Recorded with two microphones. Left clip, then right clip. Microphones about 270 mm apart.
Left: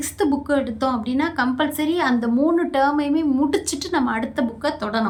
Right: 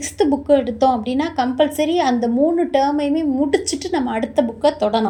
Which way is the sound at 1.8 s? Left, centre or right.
Left.